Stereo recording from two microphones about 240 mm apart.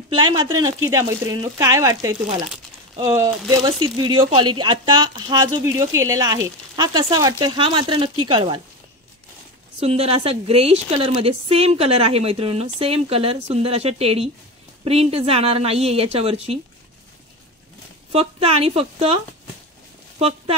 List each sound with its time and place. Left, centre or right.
0.1 s a woman's voice: centre
9.8 s a woman's voice: right
18.1 s a woman's voice: right